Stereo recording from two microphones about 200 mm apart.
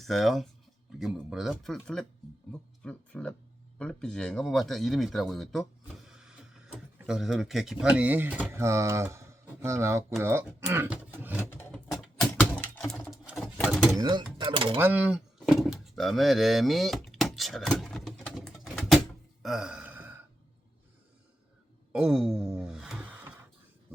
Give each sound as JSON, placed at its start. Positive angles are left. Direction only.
{"t": 0.0, "sound": "speech", "side_deg": 0}
{"t": 11.5, "sound": "a sound", "side_deg": 5}
{"t": 12.8, "sound": "pigeon", "side_deg": 5}
{"t": 14.0, "sound": "speech", "side_deg": -20}
{"t": 14.8, "sound": "a sound", "side_deg": -10}
{"t": 21.9, "sound": "speech", "side_deg": -5}